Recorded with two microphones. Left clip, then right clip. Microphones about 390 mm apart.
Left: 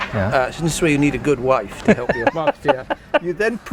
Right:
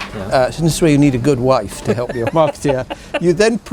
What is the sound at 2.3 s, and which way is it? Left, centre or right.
Speech, left.